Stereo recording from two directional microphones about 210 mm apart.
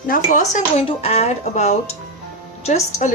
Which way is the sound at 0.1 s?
40° left (ahead or behind).